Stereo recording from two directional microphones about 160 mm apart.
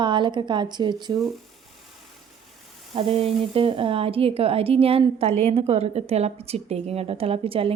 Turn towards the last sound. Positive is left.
turn(degrees=-35)  # may be behind; listen again after turning